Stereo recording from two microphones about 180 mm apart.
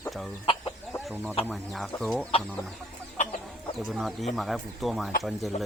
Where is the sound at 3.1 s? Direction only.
45° left (ahead or behind).